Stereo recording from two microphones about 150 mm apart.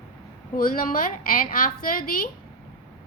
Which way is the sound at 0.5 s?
70° left (ahead or behind).